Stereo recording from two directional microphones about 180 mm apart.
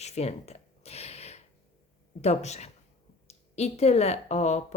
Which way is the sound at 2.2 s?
35° left (ahead or behind).